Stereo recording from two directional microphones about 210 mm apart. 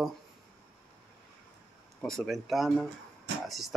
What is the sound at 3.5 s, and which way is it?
Music, centre (ahead or behind).